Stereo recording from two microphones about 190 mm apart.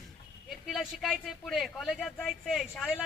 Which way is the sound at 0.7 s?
Centre (ahead or behind).